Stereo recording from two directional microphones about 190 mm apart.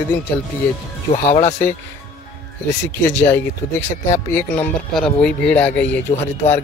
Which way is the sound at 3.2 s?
10° left (ahead or behind).